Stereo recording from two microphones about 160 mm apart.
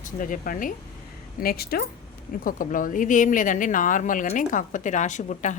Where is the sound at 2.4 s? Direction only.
60° left (ahead or behind).